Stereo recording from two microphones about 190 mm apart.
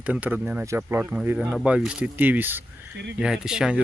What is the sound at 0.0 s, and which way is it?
Speech, 5° right (ahead or behind).